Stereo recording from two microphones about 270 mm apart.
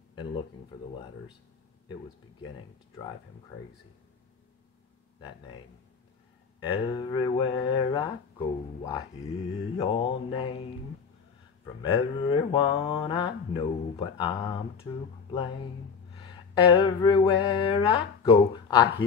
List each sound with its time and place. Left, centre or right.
0.1 s speech: centre
6.6 s speech: centre
11.8 s speech: centre
16.2 s speech: centre